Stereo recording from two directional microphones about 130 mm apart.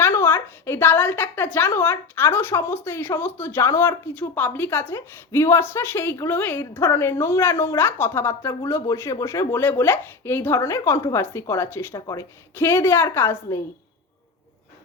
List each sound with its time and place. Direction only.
0.0 s a woman's voice: 15° left (ahead or behind)